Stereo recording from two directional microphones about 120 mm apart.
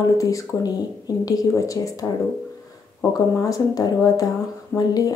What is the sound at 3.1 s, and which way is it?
Speech, 30° left (ahead or behind).